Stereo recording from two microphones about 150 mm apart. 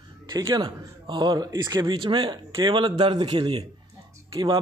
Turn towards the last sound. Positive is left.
turn(degrees=-25)  # may be behind; listen again after turning